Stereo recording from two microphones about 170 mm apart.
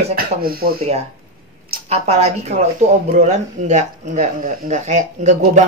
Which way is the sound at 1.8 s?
40° right (ahead or behind).